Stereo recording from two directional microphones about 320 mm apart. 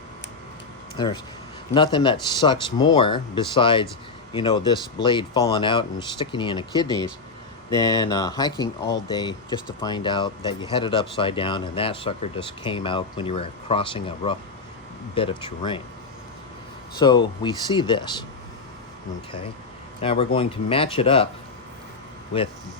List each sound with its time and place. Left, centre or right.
0.9 s speech: centre
16.9 s speech: centre
20.0 s speech: centre